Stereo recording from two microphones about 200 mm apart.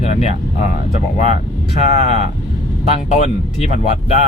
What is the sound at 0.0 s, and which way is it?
Speech, 35° left (ahead or behind).